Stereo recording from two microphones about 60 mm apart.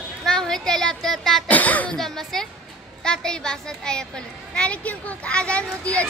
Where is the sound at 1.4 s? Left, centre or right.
Left.